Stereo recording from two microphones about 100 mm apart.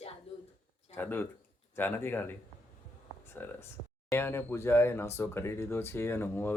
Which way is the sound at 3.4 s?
20° left (ahead or behind).